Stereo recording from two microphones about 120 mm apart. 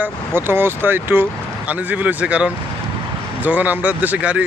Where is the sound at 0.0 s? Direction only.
20° right (ahead or behind).